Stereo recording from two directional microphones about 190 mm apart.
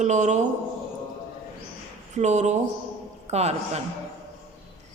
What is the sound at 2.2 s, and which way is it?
A woman's voice, 40° right (ahead or behind).